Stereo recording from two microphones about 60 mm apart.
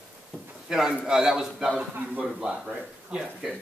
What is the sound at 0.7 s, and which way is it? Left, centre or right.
A man's voice, centre.